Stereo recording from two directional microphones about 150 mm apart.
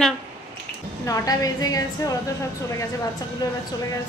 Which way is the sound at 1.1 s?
25° left (ahead or behind).